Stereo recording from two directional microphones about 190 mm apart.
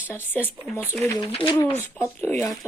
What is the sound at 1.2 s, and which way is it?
Speech, 30° left (ahead or behind).